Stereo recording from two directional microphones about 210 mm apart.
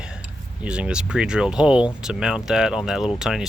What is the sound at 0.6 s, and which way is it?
Speech, 5° right (ahead or behind).